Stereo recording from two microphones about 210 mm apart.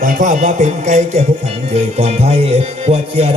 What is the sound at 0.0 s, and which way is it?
Music, 35° right (ahead or behind).